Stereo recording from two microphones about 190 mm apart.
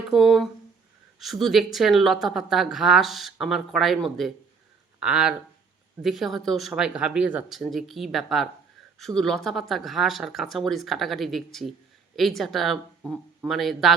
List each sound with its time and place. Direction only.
0.1 s speech: centre (ahead or behind)